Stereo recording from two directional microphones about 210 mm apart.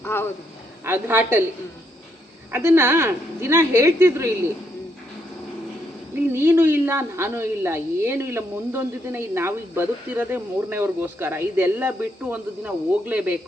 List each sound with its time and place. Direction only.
0.0 s speech: 10° left (ahead or behind)
0.9 s a woman's voice: 10° right (ahead or behind)
2.5 s a woman's voice: 10° right (ahead or behind)
6.3 s a woman's voice: 10° right (ahead or behind)